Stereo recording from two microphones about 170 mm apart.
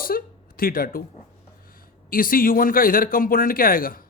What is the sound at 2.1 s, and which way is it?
Speech, 55° left (ahead or behind).